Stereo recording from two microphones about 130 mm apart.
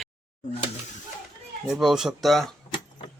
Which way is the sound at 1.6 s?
5° right (ahead or behind).